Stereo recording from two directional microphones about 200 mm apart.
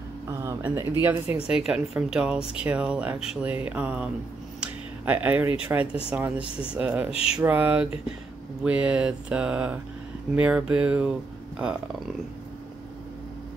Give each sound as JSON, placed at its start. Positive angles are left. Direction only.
{"t": 0.4, "sound": "speech", "side_deg": -15}
{"t": 7.1, "sound": "a sound", "side_deg": 30}
{"t": 7.3, "sound": "speech", "side_deg": -10}